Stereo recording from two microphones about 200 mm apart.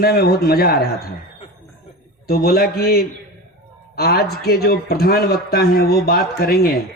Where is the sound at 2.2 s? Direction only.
50° left (ahead or behind).